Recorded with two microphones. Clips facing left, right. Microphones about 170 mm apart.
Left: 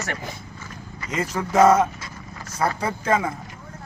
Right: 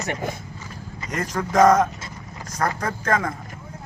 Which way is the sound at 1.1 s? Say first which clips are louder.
Even; 10° left (ahead or behind).